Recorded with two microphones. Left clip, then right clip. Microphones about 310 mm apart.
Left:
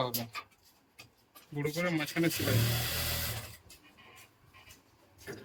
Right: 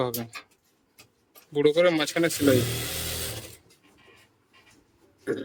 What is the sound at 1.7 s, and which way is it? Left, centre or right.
Speech, right.